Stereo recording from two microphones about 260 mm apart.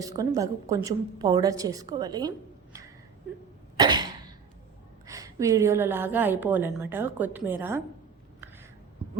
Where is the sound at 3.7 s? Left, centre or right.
Centre.